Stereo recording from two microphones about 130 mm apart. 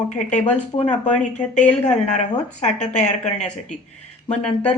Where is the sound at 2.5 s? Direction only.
65° left (ahead or behind).